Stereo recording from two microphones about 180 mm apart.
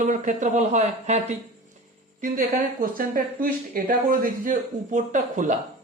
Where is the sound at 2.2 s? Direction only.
50° right (ahead or behind).